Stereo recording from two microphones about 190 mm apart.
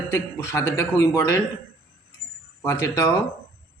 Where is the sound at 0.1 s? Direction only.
15° left (ahead or behind).